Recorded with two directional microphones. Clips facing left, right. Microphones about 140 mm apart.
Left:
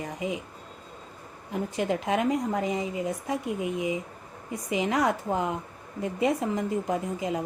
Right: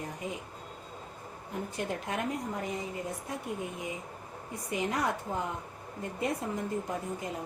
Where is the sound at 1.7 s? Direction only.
90° left.